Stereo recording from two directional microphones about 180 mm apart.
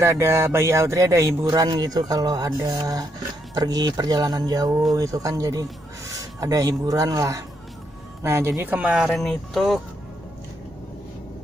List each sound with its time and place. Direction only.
0.0 s speech: 15° right (ahead or behind); by 9.8 s centre (ahead or behind)